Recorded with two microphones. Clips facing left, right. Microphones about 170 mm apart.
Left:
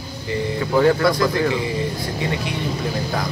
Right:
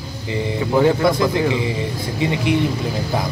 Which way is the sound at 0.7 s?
20° right (ahead or behind).